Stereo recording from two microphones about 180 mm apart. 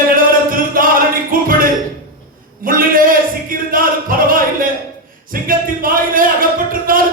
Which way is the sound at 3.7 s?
50° right (ahead or behind).